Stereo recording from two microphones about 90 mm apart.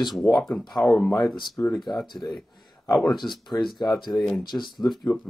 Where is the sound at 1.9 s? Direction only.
Centre (ahead or behind).